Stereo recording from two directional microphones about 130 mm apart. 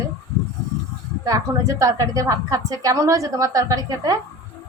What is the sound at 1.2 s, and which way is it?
A woman's voice, 25° right (ahead or behind).